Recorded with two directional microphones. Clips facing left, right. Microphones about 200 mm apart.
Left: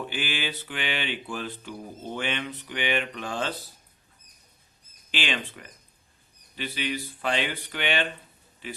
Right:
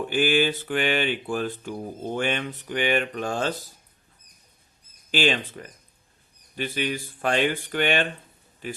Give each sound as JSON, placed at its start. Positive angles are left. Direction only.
{"t": 0.1, "sound": "speech", "side_deg": -45}
{"t": 5.1, "sound": "speech", "side_deg": -40}